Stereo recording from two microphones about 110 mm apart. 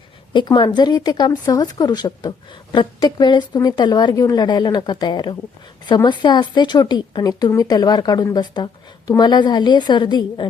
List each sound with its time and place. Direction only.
0.3 s speech: 45° left (ahead or behind)